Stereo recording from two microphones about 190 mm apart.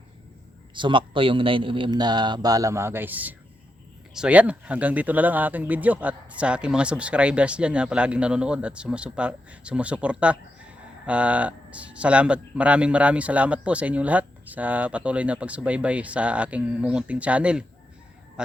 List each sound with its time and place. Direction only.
0.7 s a man's voice: 25° right (ahead or behind); by 18.5 s 5° right (ahead or behind)